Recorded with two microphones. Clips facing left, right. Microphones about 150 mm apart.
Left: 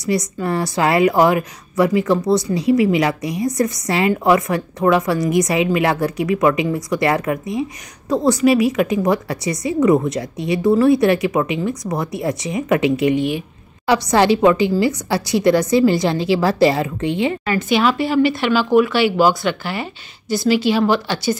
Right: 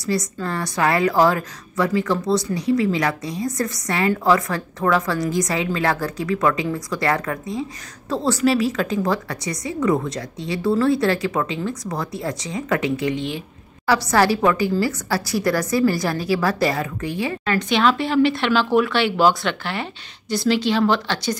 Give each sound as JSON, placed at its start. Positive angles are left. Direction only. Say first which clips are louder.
{"t": 0.4, "sound": "a woman's voice", "louder": "left 4 dB", "side_deg": 20}
{"t": 17.5, "sound": "speech", "louder": "even", "side_deg": 5}